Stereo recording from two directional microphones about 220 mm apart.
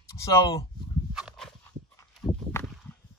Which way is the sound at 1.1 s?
Centre (ahead or behind).